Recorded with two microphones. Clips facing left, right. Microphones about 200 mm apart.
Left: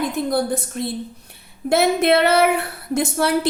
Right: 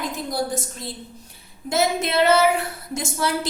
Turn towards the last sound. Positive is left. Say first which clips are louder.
# left 6 dB
turn(degrees=60)  # may be behind; listen again after turning